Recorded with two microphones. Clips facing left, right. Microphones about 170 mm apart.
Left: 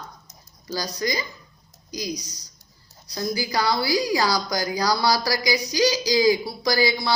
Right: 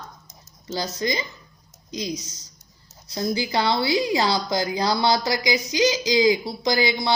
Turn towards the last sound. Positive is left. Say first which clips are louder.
# even
turn(degrees=-20)  # may be behind; listen again after turning